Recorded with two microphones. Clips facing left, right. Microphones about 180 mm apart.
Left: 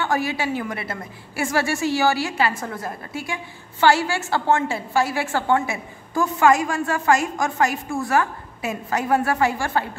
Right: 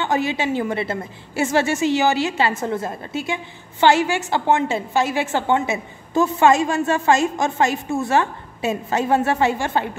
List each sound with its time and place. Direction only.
0.0 s a woman's voice: 20° right (ahead or behind)